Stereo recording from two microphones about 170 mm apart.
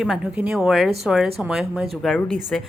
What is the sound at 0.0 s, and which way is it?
A woman's voice, 5° right (ahead or behind).